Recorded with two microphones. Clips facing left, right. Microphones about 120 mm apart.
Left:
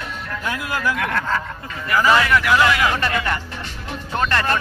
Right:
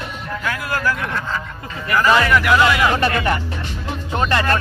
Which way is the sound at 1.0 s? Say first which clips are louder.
Left 2 dB; 65° left (ahead or behind).